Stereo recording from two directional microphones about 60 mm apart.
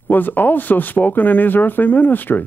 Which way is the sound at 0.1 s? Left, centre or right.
Left.